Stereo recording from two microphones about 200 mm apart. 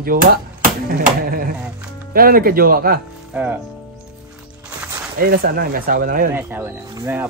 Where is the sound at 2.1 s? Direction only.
45° right (ahead or behind).